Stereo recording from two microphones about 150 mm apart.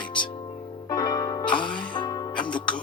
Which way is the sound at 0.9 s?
25° left (ahead or behind).